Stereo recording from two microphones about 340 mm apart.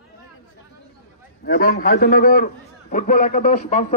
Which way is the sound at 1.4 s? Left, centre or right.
Left.